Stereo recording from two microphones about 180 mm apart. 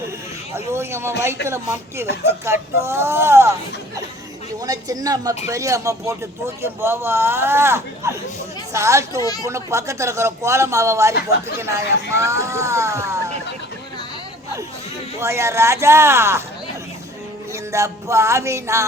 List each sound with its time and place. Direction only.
0.5 s speech: 15° right (ahead or behind)
4.6 s speech: 20° right (ahead or behind)
15.2 s speech: 15° right (ahead or behind)
17.7 s speech: 15° right (ahead or behind)